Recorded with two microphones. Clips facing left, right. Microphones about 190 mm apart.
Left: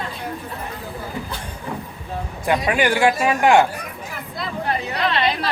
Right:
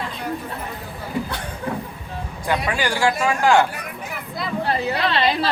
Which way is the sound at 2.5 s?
20° left (ahead or behind).